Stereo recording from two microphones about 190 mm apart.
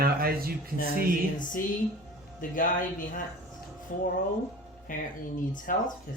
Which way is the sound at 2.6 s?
45° left (ahead or behind).